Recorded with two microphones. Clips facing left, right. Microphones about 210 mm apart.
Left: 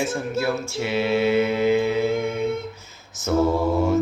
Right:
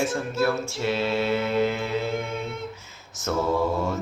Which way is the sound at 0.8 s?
15° left (ahead or behind).